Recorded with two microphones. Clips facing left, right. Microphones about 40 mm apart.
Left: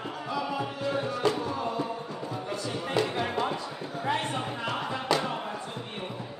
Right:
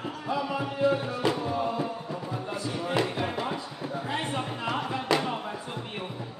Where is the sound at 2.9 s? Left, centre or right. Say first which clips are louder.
Left 1 dB; centre.